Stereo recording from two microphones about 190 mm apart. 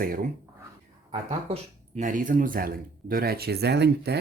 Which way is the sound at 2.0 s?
45° right (ahead or behind).